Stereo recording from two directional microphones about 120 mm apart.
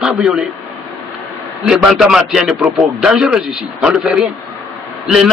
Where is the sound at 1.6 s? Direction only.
5° right (ahead or behind).